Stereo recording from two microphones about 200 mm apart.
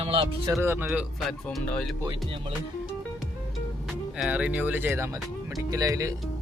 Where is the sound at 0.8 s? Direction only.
Centre (ahead or behind).